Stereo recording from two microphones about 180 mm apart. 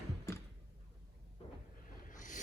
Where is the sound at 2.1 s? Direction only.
45° left (ahead or behind).